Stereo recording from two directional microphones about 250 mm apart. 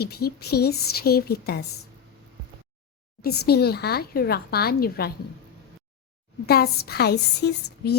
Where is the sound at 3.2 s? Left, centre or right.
Left.